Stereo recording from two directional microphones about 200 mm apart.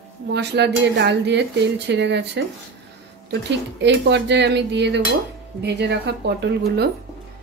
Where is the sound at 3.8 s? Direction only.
60° right (ahead or behind).